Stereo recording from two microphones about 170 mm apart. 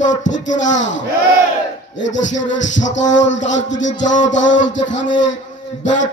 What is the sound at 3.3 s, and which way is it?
Music, 45° left (ahead or behind).